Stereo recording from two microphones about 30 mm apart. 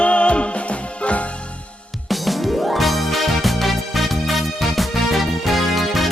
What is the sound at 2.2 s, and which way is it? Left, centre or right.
Music, centre.